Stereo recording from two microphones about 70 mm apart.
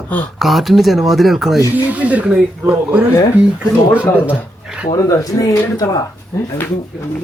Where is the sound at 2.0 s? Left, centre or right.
Centre.